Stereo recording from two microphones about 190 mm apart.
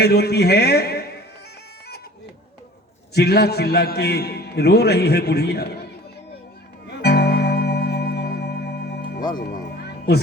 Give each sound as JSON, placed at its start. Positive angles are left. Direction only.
{"t": 0.0, "sound": "a man's voice", "side_deg": 60}
{"t": 3.2, "sound": "a man's voice", "side_deg": 60}
{"t": 6.8, "sound": "music", "side_deg": 60}